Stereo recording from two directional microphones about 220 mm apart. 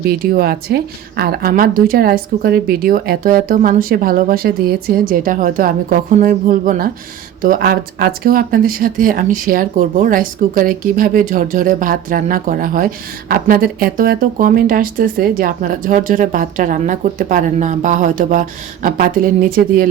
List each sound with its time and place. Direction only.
0.1 s speech: 45° right (ahead or behind)